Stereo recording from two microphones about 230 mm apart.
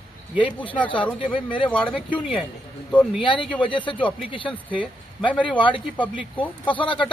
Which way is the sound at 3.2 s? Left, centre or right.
Left.